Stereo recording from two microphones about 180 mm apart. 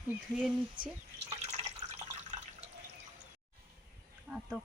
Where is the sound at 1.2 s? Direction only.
35° right (ahead or behind).